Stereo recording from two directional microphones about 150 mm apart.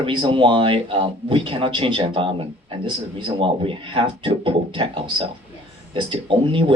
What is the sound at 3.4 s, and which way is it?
A man's voice, 35° right (ahead or behind).